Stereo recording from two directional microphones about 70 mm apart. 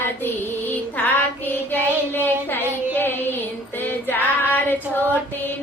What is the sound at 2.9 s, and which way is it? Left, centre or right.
Child singing, left.